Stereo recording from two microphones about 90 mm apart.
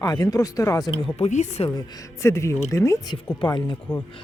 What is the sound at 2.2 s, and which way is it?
Speech, 30° left (ahead or behind).